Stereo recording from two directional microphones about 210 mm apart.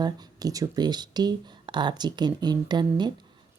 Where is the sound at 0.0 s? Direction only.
15° right (ahead or behind).